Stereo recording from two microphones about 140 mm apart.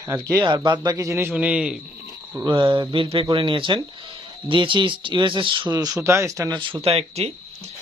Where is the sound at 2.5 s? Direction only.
35° right (ahead or behind).